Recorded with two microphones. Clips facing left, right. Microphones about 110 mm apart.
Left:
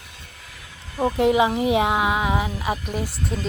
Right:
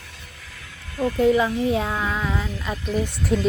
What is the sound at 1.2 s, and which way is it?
Speech, 85° left.